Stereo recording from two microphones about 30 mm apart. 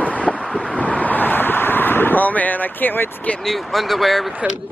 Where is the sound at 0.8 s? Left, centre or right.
Left.